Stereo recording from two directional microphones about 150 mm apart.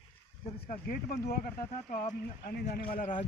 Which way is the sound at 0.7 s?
80° left.